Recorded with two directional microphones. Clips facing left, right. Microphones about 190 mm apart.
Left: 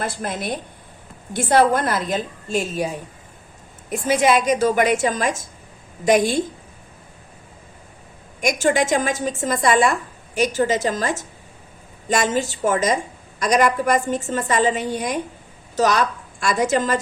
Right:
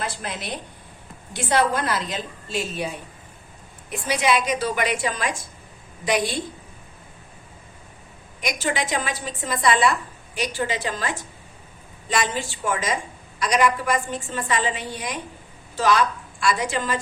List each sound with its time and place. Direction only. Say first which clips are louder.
0.0 s a woman's voice: left 5 dB; 50° left (ahead or behind)
8.4 s a woman's voice: left 7 dB; 45° left (ahead or behind)